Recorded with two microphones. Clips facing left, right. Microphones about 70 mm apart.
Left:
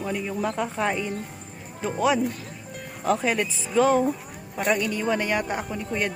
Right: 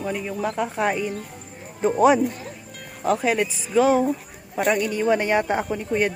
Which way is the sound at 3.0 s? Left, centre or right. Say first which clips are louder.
Right 2 dB; centre.